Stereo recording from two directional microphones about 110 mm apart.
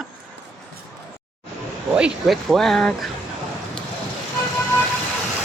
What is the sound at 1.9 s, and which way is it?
Speech, 10° right (ahead or behind).